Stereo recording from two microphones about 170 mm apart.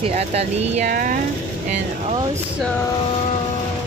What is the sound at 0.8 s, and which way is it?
Speech, 55° right (ahead or behind).